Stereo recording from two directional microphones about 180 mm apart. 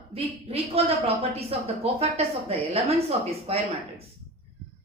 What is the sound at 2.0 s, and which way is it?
Speech, 35° right (ahead or behind).